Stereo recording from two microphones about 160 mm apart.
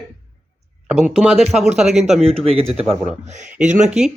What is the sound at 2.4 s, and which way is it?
Speech, 40° right (ahead or behind).